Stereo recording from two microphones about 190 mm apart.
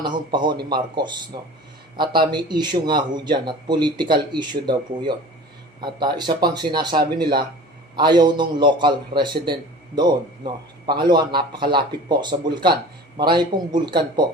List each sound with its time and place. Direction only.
0.0 s a man's voice: 25° right (ahead or behind)
2.3 s a man's voice: 25° right (ahead or behind)
7.9 s a man's voice: 25° right (ahead or behind)